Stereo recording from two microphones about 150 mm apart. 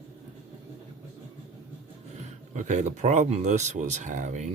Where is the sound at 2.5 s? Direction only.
55° right (ahead or behind).